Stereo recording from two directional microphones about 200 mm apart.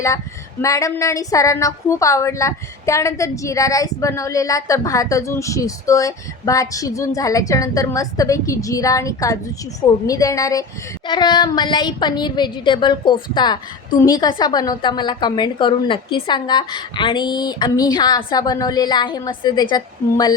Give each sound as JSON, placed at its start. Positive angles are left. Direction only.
{"t": 0.6, "sound": "a woman's voice", "side_deg": 15}